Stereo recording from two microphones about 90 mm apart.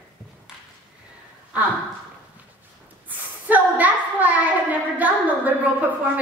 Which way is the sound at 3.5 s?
20° right (ahead or behind).